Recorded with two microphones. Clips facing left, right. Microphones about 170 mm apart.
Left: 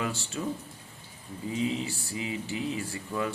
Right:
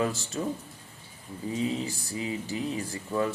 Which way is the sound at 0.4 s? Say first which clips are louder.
Right 2 dB; 35° right (ahead or behind).